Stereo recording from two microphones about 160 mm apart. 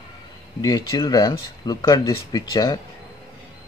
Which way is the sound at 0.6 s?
25° left (ahead or behind).